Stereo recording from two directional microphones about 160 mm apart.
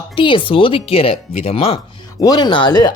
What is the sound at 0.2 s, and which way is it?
Speech, 30° left (ahead or behind).